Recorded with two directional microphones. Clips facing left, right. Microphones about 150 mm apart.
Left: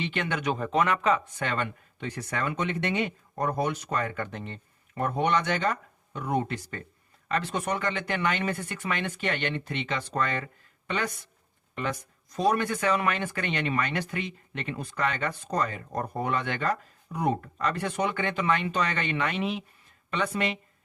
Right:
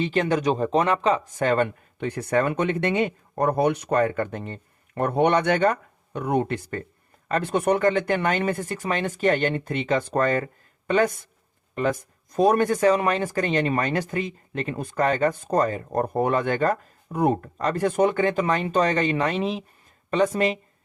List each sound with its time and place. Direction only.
0.0 s speech: 35° right (ahead or behind)
4.9 s speech: 65° right (ahead or behind); by 20.6 s 40° right (ahead or behind)